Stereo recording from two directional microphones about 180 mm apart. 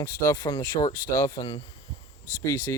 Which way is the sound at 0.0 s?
20° left (ahead or behind).